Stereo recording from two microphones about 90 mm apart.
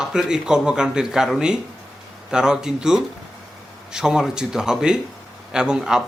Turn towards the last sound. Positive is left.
turn(degrees=-10)  # may be behind; listen again after turning